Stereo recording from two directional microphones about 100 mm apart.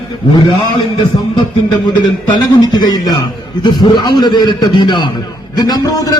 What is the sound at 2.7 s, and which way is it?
A man's voice, 40° left (ahead or behind).